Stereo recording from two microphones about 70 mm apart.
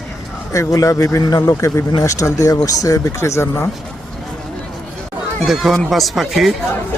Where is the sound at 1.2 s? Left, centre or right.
Left.